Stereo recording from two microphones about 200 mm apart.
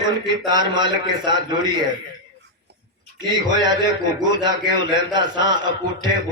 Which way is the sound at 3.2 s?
20° right (ahead or behind).